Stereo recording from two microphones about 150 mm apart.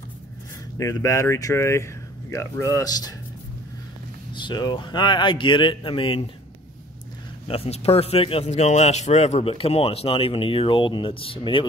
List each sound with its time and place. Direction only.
0.7 s speech: 20° left (ahead or behind)
4.3 s a man's voice: 30° left (ahead or behind)
7.4 s a man's voice: 40° left (ahead or behind)